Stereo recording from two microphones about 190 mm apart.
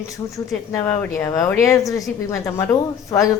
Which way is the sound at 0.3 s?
15° left (ahead or behind).